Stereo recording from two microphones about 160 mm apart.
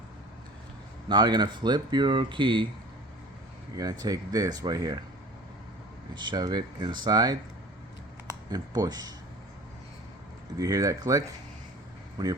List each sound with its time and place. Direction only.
1.0 s speech: 25° right (ahead or behind)
3.8 s speech: 25° right (ahead or behind)
6.1 s speech: 25° right (ahead or behind)
10.6 s speech: 20° right (ahead or behind)